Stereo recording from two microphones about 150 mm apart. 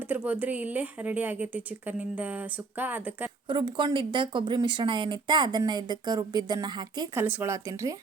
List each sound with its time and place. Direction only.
0.1 s speech: 10° right (ahead or behind)
3.5 s speech: 30° right (ahead or behind)
7.2 s speech: 15° right (ahead or behind)